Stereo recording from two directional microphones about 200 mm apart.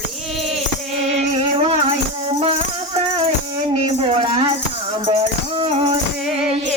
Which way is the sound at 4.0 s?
30° right (ahead or behind).